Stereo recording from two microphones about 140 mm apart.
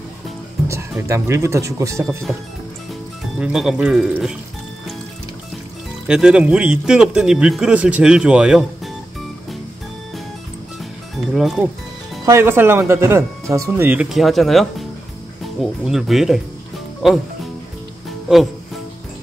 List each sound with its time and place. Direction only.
0.7 s speech: 20° right (ahead or behind)
3.3 s speech: 5° right (ahead or behind)
6.0 s speech: 5° right (ahead or behind)
11.3 s speech: centre (ahead or behind)
12.3 s speech: 15° right (ahead or behind)
14.0 s speech: centre (ahead or behind)